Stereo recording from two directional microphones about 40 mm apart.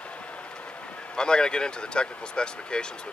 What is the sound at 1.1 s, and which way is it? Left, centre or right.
Speech, left.